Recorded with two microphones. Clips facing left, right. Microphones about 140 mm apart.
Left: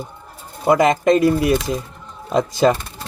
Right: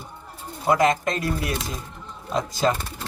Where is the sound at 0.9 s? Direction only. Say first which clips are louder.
Left 9 dB; 80° left.